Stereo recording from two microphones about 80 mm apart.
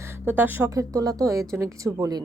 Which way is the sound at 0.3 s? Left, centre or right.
Right.